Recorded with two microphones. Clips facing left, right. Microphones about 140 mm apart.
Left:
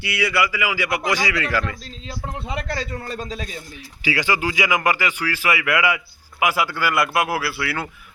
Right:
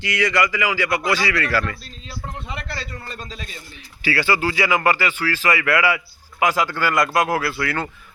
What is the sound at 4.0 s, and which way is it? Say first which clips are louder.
Speech: right 1 dB; 15° left (ahead or behind).